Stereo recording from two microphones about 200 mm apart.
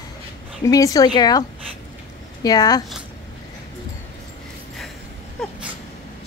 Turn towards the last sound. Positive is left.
turn(degrees=5)  # may be behind; listen again after turning